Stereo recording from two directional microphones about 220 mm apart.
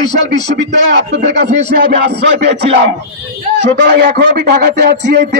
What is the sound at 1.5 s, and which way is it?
A man's voice, 35° right (ahead or behind).